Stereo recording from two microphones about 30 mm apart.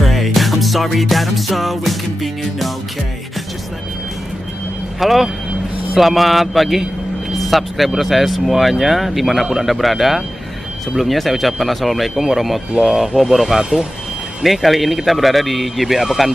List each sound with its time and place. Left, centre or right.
0.0 s music: centre
5.0 s speech: centre
13.6 s speech: right
14.4 s speech: centre